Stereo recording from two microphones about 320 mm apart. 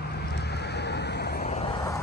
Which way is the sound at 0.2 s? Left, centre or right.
Left.